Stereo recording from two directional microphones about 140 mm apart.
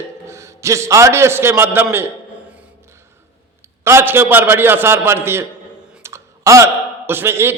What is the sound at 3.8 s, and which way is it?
A man's voice, 20° right (ahead or behind).